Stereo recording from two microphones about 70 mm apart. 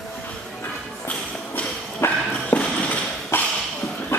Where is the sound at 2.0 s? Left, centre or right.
Left.